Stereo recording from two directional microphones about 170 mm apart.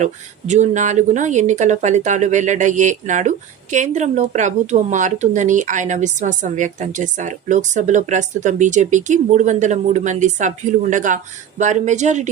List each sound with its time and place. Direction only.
0.0 s speech: 45° right (ahead or behind)